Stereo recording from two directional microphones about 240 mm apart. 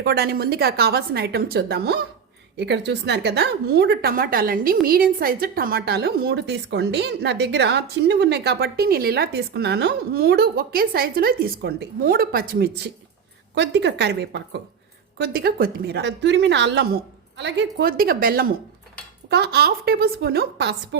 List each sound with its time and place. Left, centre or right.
0.0 s a woman's voice: right